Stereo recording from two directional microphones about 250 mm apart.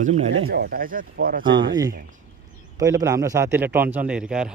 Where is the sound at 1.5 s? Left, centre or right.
Right.